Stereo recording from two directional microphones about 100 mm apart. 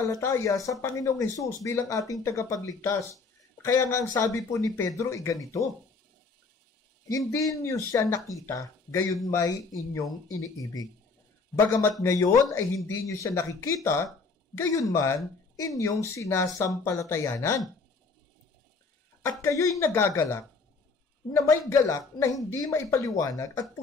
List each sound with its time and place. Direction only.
0.0 s speech: 30° left (ahead or behind)
7.3 s speech: 35° left (ahead or behind)
11.6 s speech: 25° left (ahead or behind)
19.4 s speech: 35° left (ahead or behind)